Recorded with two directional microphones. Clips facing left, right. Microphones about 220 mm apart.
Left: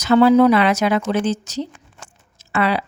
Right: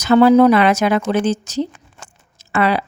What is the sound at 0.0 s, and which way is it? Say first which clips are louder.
A woman's voice: right 2 dB; 50° right (ahead or behind).